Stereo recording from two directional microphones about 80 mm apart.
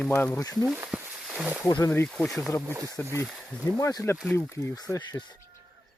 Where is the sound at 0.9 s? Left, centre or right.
Centre.